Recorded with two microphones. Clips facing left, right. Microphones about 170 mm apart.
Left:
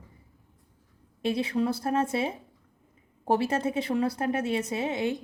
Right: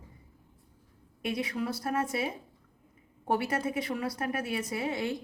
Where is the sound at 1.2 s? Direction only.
25° left (ahead or behind).